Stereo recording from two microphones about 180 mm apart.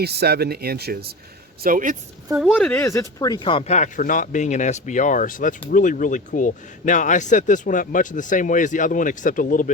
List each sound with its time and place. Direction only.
0.0 s speech: 65° right (ahead or behind)
1.6 s speech: 50° right (ahead or behind)
2.3 s speech: centre (ahead or behind); by 3.8 s 30° left (ahead or behind)
3.8 s speech: 45° left (ahead or behind)